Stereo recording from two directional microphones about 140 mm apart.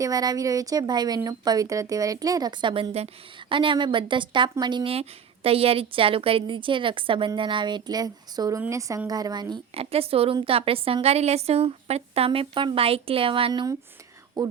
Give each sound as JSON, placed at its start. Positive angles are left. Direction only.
{"t": 0.0, "sound": "a woman's voice", "side_deg": -25}
{"t": 9.7, "sound": "a woman's voice", "side_deg": -45}
{"t": 13.5, "sound": "speech", "side_deg": -25}